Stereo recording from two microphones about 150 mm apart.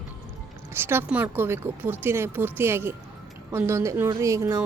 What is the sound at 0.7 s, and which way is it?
Speech, 15° right (ahead or behind).